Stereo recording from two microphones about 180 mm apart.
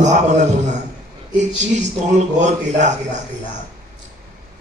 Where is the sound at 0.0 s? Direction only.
40° right (ahead or behind).